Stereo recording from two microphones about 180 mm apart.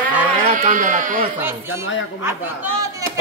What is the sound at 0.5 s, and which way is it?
Speech, 40° right (ahead or behind).